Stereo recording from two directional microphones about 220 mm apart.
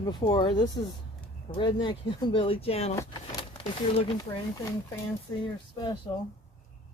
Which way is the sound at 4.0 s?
25° left (ahead or behind).